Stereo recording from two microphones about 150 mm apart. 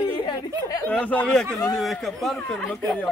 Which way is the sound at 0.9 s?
10° left (ahead or behind).